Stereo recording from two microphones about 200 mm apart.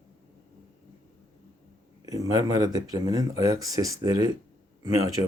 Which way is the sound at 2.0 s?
15° right (ahead or behind).